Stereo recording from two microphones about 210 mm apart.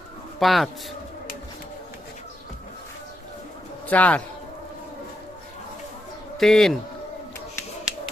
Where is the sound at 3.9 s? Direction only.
5° left (ahead or behind).